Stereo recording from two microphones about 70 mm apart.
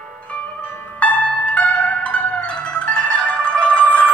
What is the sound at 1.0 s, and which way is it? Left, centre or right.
Zither, centre.